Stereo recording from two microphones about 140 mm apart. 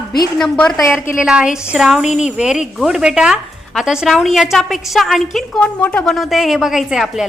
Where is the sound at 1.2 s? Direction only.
5° right (ahead or behind).